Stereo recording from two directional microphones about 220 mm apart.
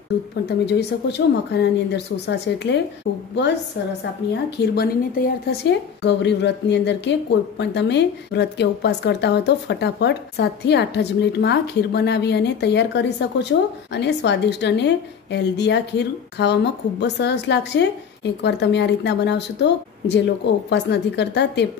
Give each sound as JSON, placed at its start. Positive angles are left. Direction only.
{"t": 0.7, "sound": "speech", "side_deg": 50}
{"t": 4.3, "sound": "speech", "side_deg": 50}